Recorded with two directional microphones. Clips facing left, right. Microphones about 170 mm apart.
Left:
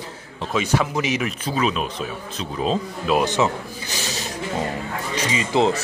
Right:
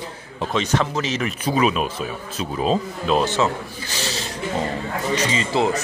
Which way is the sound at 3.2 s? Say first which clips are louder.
Left 1 dB; 15° left (ahead or behind).